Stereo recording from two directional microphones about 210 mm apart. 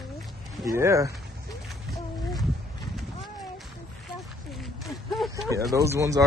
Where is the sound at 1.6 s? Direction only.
Centre (ahead or behind).